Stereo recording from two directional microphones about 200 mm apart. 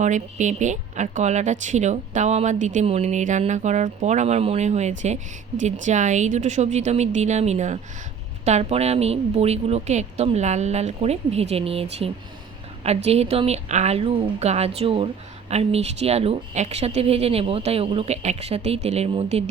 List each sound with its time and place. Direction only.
0.0 s a woman's voice: 40° right (ahead or behind)